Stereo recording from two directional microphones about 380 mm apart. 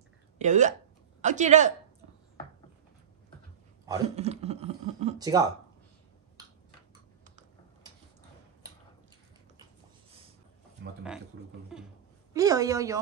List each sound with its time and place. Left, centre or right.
0.4 s speech: centre
3.8 s speech: centre
7.2 s typing: centre
11.3 s speech: right
11.7 s a sound: centre
12.4 s a woman's voice: centre